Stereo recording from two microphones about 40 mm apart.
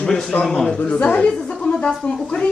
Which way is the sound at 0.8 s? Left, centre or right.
Left.